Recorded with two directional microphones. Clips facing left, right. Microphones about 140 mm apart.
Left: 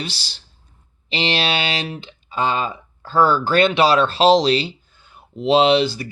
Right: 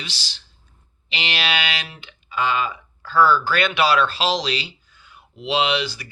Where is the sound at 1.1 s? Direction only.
35° left (ahead or behind).